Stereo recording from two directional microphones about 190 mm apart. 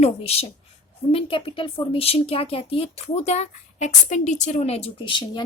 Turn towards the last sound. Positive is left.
turn(degrees=25)  # may be behind; listen again after turning